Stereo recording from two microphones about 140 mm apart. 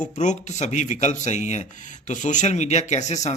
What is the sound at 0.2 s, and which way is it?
Speech, 60° left (ahead or behind).